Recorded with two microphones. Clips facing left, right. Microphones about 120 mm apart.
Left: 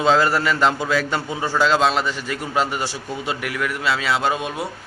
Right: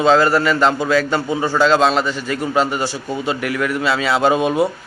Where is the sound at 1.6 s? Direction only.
10° left (ahead or behind).